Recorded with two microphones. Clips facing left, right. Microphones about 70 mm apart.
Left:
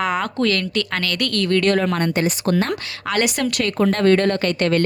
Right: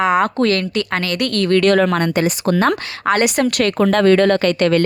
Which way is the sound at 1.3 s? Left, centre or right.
Right.